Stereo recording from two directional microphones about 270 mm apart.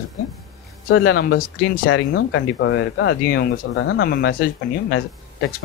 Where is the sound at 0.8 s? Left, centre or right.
Left.